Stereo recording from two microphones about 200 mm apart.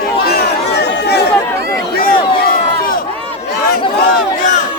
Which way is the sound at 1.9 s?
45° left (ahead or behind).